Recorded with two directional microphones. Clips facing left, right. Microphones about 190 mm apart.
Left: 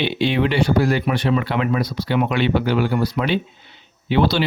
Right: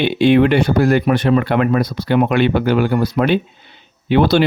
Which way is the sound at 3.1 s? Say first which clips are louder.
Right 5 dB; 50° right (ahead or behind).